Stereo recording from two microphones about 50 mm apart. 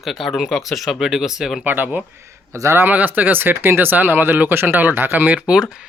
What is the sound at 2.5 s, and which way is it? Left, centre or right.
Speech, right.